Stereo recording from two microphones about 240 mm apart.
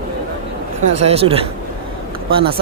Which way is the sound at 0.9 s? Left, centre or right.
Right.